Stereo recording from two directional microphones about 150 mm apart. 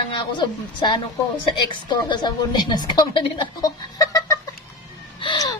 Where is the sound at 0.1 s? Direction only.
30° left (ahead or behind).